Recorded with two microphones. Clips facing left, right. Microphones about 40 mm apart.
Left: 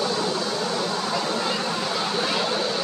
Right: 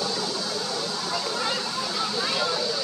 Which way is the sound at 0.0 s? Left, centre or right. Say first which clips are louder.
Left 4 dB; left.